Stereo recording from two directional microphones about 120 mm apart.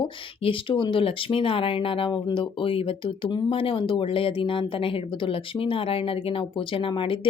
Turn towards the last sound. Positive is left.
turn(degrees=45)  # may be behind; listen again after turning